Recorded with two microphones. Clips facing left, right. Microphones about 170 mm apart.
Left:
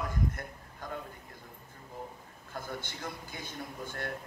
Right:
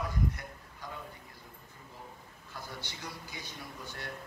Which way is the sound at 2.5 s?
50° left (ahead or behind).